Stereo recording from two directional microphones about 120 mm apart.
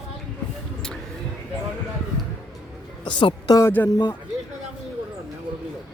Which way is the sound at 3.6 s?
20° left (ahead or behind).